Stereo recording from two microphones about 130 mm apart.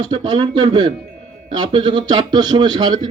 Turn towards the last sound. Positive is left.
turn(degrees=-35)  # may be behind; listen again after turning